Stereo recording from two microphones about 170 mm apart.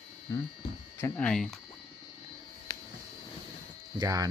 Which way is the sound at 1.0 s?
5° left (ahead or behind).